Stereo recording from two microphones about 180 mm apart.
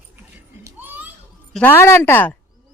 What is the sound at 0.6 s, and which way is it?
Children playing, 15° right (ahead or behind).